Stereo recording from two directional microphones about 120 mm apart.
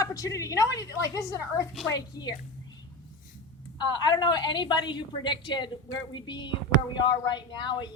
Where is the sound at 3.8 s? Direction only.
35° left (ahead or behind).